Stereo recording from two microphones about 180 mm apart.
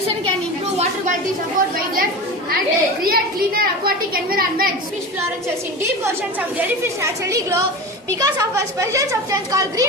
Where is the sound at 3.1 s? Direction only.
55° right (ahead or behind).